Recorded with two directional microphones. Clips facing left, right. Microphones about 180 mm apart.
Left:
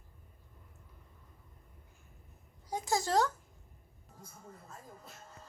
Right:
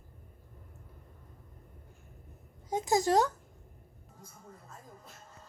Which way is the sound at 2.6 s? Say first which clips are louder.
Right 6 dB; 20° right (ahead or behind).